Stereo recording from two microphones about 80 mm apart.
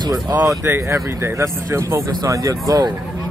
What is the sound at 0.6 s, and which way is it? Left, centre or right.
Speech, right.